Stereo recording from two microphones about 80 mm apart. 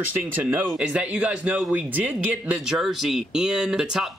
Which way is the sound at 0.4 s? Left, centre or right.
Right.